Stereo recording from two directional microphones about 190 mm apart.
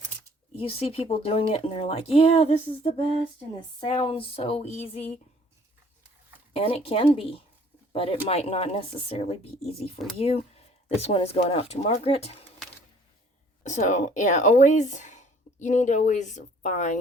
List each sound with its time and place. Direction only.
0.6 s speech: 30° left (ahead or behind)
6.5 s speech: 30° left (ahead or behind)
13.7 s speech: 40° left (ahead or behind)